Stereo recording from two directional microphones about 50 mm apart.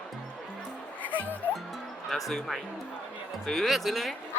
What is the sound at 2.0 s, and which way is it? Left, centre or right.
Speech, centre.